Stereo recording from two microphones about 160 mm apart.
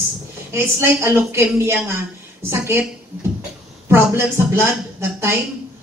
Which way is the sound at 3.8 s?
15° right (ahead or behind).